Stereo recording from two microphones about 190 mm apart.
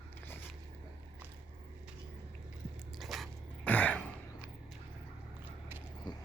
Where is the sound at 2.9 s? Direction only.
Centre (ahead or behind).